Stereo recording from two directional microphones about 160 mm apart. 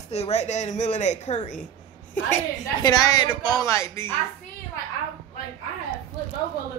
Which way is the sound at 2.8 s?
25° left (ahead or behind).